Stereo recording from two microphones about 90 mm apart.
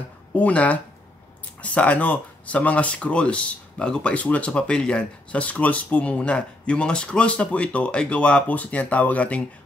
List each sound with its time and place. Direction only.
0.3 s speech: 15° left (ahead or behind)